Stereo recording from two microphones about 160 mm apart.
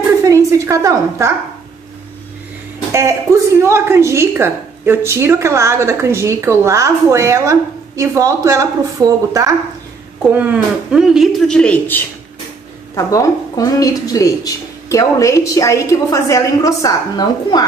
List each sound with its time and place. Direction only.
0.2 s a sound: 20° right (ahead or behind)
2.9 s a woman's voice: 20° right (ahead or behind)
10.3 s a man's voice: 10° right (ahead or behind); by 12.0 s 10° left (ahead or behind)
12.9 s a woman's voice: 20° left (ahead or behind)